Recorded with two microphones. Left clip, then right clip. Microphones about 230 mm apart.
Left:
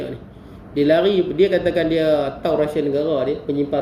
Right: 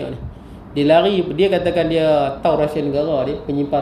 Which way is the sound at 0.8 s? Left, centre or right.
Right.